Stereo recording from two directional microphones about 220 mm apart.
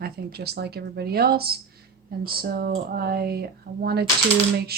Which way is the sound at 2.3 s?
40° right (ahead or behind).